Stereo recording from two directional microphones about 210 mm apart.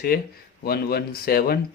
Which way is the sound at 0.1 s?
45° left (ahead or behind).